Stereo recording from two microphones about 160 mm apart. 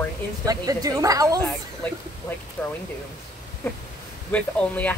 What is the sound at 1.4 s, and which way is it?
Speech, 15° left (ahead or behind).